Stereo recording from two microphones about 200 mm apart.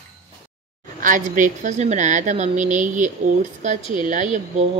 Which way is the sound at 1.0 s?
40° right (ahead or behind).